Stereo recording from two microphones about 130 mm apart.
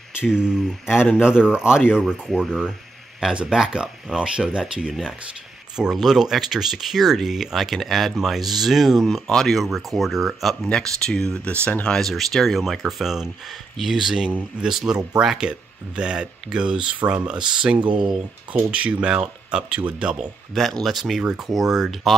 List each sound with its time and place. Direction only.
0.2 s speech: 5° right (ahead or behind)